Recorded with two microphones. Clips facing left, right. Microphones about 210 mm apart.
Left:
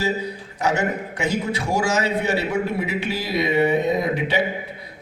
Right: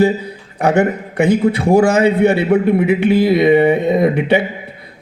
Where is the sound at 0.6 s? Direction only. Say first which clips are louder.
Right 8 dB; 55° right (ahead or behind).